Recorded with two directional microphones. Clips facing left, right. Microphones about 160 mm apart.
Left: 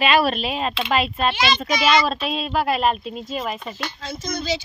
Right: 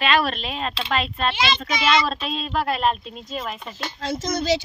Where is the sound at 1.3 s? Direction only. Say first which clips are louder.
Left 2 dB; 25° right (ahead or behind).